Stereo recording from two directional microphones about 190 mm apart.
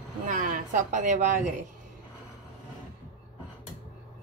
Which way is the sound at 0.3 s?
45° right (ahead or behind).